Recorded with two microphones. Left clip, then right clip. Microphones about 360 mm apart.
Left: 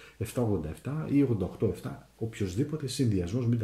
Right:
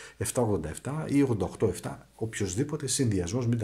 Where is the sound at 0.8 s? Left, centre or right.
Centre.